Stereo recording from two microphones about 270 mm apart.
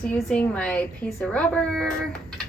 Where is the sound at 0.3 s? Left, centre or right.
Centre.